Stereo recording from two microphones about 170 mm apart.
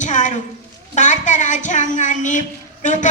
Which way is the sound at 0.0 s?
45° left (ahead or behind).